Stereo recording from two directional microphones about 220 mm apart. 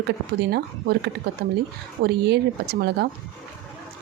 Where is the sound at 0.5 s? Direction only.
50° right (ahead or behind).